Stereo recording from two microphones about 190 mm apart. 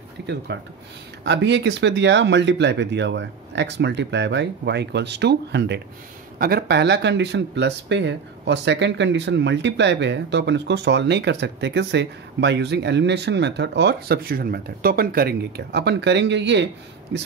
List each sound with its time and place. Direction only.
0.5 s speech: 70° right (ahead or behind)
6.3 s speech: 55° right (ahead or behind); by 16.6 s 70° right (ahead or behind)